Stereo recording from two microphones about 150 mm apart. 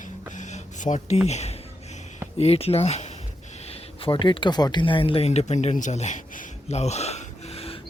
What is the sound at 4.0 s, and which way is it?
Speech, 35° left (ahead or behind).